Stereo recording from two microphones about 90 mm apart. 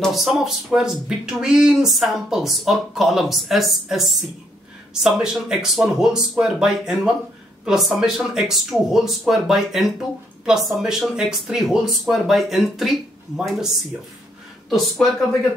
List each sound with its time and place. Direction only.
0.0 s speech: centre (ahead or behind)
14.7 s speech: centre (ahead or behind)